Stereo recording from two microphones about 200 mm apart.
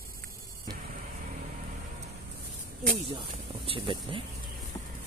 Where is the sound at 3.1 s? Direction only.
25° right (ahead or behind).